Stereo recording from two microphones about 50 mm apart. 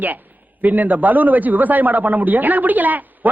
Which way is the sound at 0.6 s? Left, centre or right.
Right.